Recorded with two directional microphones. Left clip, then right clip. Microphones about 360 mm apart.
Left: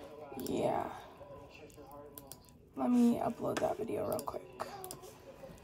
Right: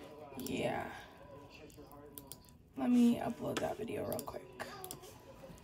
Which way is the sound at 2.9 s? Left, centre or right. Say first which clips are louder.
Left 1 dB; centre.